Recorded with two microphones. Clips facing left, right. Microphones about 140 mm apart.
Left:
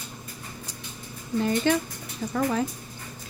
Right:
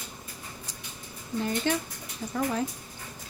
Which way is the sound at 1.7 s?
90° left.